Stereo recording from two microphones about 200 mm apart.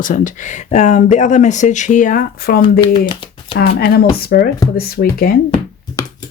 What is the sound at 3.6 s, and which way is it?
Speech, 50° left (ahead or behind).